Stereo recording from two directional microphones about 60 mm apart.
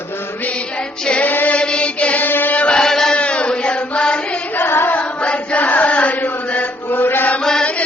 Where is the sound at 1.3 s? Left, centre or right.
Left.